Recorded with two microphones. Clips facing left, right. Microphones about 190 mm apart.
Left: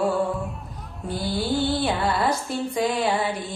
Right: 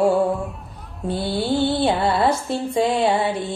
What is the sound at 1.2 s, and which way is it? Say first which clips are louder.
Mantra: right 3 dB; 65° right (ahead or behind).